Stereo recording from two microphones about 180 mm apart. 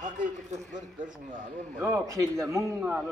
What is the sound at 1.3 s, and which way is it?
Speech, 45° right (ahead or behind).